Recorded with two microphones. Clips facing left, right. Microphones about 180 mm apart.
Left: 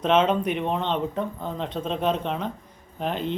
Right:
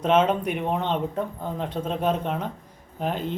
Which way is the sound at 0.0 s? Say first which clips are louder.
Even; 10° right (ahead or behind).